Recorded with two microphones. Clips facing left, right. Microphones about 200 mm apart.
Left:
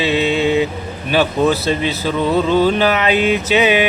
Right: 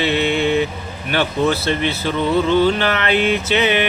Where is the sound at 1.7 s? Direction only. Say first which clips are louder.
Left 2 dB; 15° left (ahead or behind).